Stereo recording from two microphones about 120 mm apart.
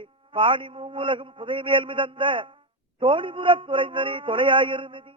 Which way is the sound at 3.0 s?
45° right (ahead or behind).